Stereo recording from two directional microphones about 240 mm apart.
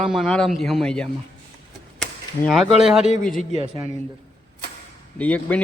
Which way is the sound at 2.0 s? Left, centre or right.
Centre.